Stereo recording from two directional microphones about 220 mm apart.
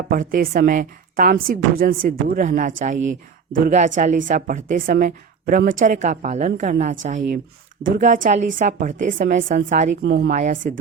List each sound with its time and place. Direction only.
0.1 s a woman's voice: 40° right (ahead or behind)
7.9 s a woman's voice: 35° right (ahead or behind)
9.9 s speech: 55° right (ahead or behind)
10.3 s a woman's voice: 35° right (ahead or behind)